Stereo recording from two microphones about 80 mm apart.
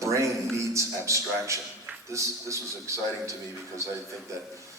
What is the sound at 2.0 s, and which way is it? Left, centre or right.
A man's voice, right.